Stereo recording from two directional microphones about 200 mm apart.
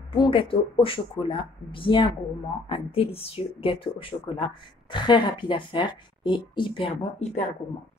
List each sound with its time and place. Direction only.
0.1 s speech: 25° left (ahead or behind)